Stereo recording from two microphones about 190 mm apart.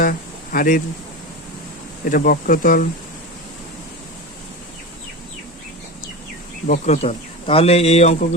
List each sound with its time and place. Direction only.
0.0 s a sound: 50° left (ahead or behind)
2.0 s speech: 50° left (ahead or behind)
6.7 s speech: 40° left (ahead or behind)